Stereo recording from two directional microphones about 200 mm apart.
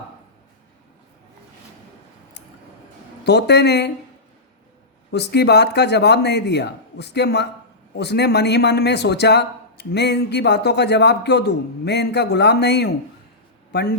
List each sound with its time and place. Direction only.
3.2 s speech: 55° left (ahead or behind)
5.1 s speech: 55° left (ahead or behind)